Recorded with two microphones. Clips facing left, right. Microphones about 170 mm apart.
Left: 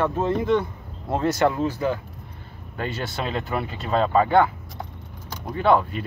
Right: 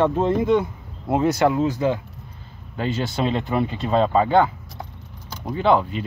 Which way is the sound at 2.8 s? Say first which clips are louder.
Right 5 dB; 25° right (ahead or behind).